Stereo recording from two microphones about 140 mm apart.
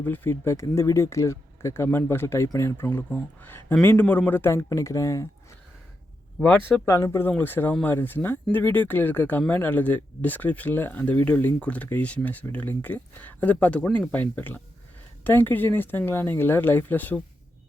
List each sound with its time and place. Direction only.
0.0 s speech: 15° left (ahead or behind)
6.7 s speech: 15° left (ahead or behind)